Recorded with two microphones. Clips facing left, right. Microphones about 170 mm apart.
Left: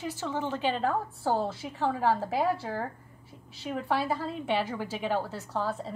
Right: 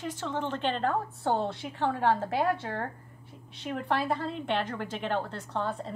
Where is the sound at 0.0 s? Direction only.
10° left (ahead or behind).